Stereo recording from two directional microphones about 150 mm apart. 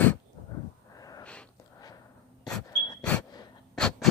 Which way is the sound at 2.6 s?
25° left (ahead or behind).